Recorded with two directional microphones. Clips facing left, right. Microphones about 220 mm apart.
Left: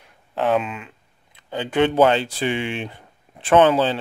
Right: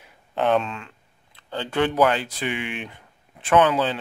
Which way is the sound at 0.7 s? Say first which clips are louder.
Left 2 dB; 15° left (ahead or behind).